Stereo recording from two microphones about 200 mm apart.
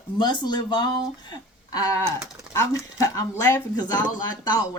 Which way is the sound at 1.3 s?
20° left (ahead or behind).